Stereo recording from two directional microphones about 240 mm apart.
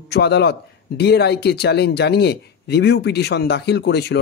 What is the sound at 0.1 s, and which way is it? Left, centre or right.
Speech, left.